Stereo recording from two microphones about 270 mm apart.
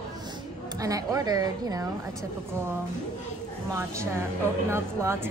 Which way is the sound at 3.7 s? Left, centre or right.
Centre.